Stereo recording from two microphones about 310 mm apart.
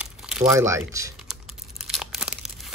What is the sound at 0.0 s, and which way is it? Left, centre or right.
Typing, centre.